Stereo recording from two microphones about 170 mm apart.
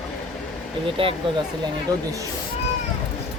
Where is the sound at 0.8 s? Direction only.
30° right (ahead or behind).